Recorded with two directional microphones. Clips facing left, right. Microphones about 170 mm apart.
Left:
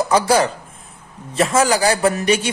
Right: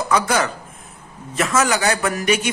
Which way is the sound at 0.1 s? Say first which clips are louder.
Left 2 dB; 30° left (ahead or behind).